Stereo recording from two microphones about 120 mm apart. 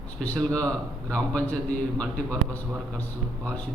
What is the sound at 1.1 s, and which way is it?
Speech, 10° left (ahead or behind).